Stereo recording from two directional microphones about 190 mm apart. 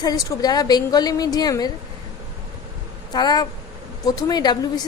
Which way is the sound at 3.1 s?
20° left (ahead or behind).